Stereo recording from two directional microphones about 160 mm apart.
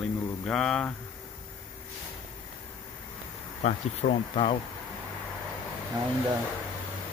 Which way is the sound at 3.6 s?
45° left (ahead or behind).